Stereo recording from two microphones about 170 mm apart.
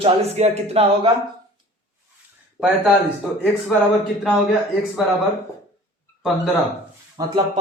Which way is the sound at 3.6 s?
5° left (ahead or behind).